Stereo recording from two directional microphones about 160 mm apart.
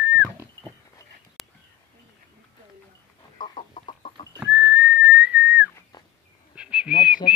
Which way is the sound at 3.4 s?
35° left (ahead or behind).